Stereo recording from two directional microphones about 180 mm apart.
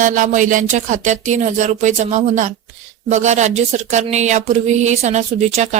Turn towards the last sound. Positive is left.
turn(degrees=-40)  # may be behind; listen again after turning